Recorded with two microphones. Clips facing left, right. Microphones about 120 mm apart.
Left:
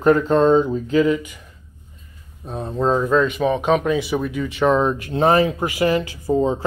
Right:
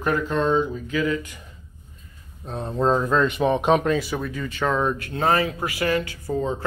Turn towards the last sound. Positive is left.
turn(degrees=25)  # may be behind; listen again after turning